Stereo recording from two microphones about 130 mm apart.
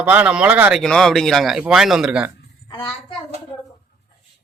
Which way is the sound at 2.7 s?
40° left (ahead or behind).